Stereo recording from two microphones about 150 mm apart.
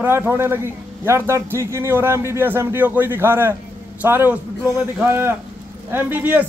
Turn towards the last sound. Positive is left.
turn(degrees=-10)  # may be behind; listen again after turning